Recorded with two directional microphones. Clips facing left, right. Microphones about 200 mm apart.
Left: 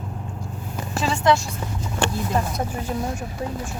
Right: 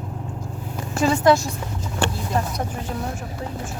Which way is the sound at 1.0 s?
40° right (ahead or behind).